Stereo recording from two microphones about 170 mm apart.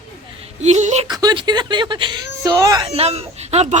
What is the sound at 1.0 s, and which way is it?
Speech, 25° right (ahead or behind).